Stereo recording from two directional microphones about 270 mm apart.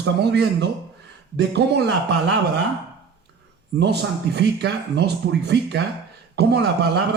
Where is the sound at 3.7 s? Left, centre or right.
Right.